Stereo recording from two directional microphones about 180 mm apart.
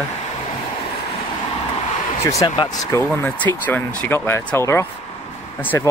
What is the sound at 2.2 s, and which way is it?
Speech, 15° left (ahead or behind).